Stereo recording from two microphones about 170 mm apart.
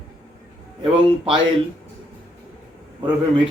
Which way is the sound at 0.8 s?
35° right (ahead or behind).